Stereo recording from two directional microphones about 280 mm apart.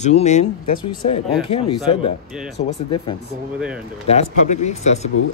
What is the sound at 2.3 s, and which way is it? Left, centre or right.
Speech, centre.